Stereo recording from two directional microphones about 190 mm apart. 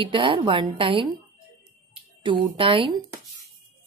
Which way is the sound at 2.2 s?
25° right (ahead or behind).